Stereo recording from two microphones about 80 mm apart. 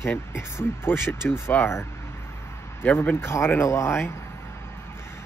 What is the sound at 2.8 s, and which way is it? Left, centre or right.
Speech, centre.